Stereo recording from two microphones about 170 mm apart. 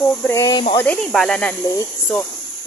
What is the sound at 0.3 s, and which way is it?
Speech, 20° left (ahead or behind).